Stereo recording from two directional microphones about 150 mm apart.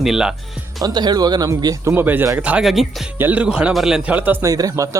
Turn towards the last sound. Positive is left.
turn(degrees=-20)  # may be behind; listen again after turning